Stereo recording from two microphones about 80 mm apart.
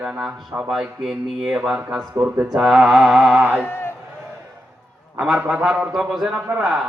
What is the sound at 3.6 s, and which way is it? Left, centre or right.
Speech, left.